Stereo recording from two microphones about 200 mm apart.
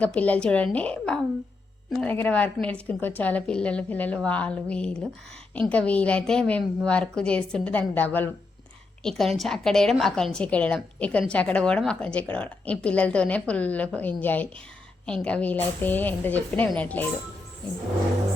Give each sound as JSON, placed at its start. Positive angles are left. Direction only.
{"t": 0.0, "sound": "a woman's voice", "side_deg": 5}